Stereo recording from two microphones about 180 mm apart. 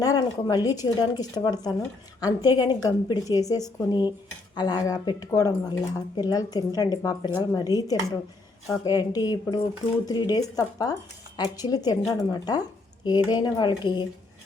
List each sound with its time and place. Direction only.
0.0 s a woman's voice: 20° left (ahead or behind)